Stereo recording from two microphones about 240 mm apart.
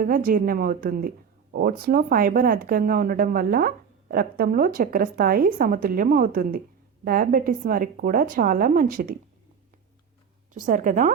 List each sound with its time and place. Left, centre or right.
0.0 s a woman's voice: right
10.5 s a woman's voice: right